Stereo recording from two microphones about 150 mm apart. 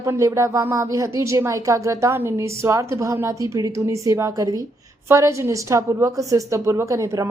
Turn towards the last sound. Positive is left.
turn(degrees=-20)  # may be behind; listen again after turning